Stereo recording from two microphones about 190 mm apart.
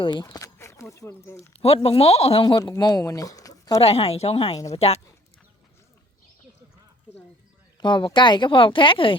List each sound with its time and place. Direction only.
0.0 s speech: 25° left (ahead or behind)
1.6 s speech: 30° left (ahead or behind)
3.8 s speech: 30° left (ahead or behind)
7.8 s speech: 25° left (ahead or behind)